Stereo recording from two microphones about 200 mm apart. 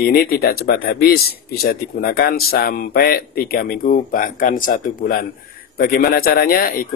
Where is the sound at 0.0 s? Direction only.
50° left (ahead or behind).